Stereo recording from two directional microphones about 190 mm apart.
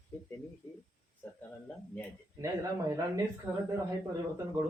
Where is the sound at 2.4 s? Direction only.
20° right (ahead or behind).